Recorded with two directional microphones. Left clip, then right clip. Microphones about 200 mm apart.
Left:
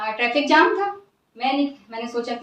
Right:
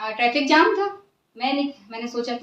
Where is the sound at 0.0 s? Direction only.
20° right (ahead or behind).